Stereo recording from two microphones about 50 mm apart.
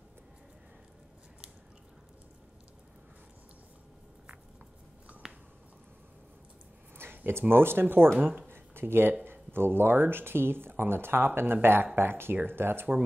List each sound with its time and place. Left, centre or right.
7.2 s speech: right
8.5 s a sound: right
9.2 s speech: right